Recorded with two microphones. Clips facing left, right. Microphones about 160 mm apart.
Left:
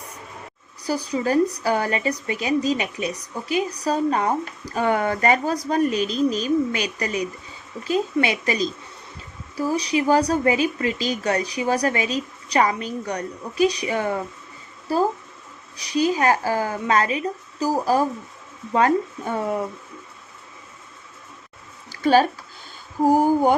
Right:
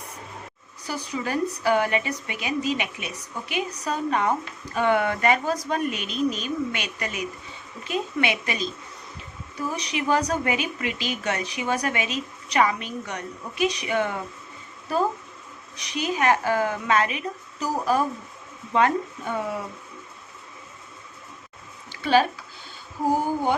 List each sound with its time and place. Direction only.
0.9 s speech: 35° left (ahead or behind)
15.8 s speech: 35° left (ahead or behind)
21.8 s a sound: 40° left (ahead or behind)